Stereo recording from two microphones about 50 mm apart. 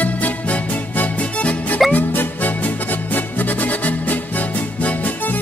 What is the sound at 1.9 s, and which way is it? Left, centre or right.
Music, left.